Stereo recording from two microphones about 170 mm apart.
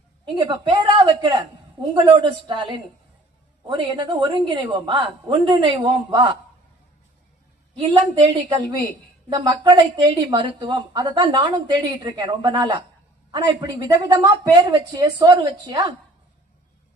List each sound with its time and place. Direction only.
0.3 s a woman's voice: 25° right (ahead or behind)
7.8 s a woman's voice: 30° right (ahead or behind)